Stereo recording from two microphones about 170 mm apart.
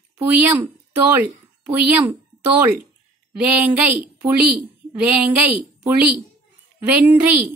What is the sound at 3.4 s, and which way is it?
A woman's voice, 10° right (ahead or behind).